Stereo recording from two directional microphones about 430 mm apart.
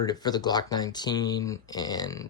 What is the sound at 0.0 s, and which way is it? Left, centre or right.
Speech, centre.